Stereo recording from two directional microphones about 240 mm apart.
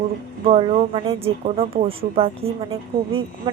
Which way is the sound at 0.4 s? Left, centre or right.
Right.